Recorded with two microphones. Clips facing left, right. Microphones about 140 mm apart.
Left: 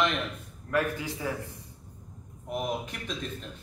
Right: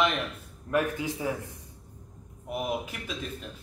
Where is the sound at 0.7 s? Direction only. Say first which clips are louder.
Right 1 dB; 20° right (ahead or behind).